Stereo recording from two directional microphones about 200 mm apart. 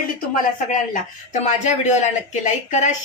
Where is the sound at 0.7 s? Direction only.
40° left (ahead or behind).